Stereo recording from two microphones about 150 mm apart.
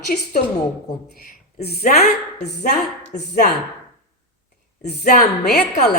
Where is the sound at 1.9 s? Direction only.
90° left.